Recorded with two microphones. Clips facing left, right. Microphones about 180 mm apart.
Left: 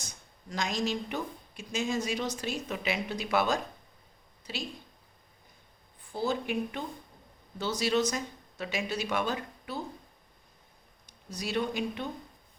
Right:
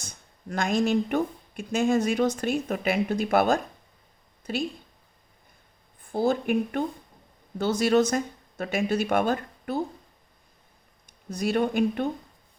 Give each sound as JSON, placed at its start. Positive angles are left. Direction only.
{"t": 0.0, "sound": "speech", "side_deg": -55}
{"t": 6.0, "sound": "speech", "side_deg": -50}
{"t": 11.3, "sound": "speech", "side_deg": -55}